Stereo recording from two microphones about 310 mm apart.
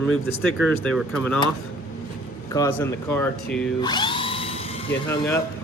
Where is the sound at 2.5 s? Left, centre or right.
Centre.